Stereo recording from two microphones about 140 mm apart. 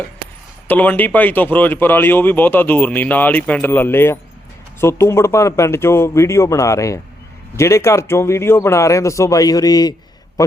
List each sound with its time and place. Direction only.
0.7 s speech: 10° left (ahead or behind); by 9.9 s 30° left (ahead or behind)